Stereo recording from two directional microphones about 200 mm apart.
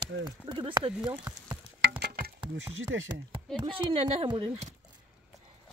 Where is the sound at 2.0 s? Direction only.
50° right (ahead or behind).